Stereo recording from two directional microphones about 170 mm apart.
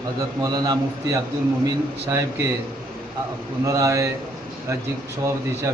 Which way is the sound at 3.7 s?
20° right (ahead or behind).